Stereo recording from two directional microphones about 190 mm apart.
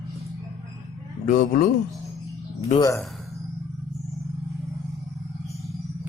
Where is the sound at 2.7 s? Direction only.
20° left (ahead or behind).